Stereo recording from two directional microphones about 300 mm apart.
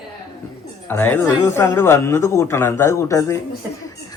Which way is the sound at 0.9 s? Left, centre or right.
Centre.